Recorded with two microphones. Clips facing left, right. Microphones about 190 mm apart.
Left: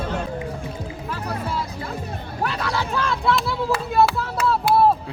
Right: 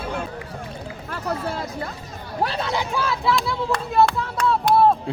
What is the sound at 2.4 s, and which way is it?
Speech, 25° right (ahead or behind).